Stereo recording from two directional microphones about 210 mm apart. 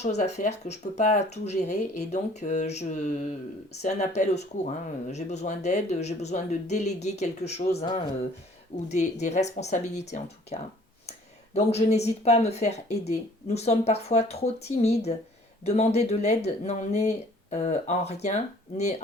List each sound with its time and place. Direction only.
0.0 s speech: 30° left (ahead or behind)